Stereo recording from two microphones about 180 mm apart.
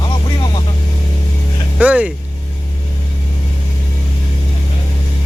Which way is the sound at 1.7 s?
5° right (ahead or behind).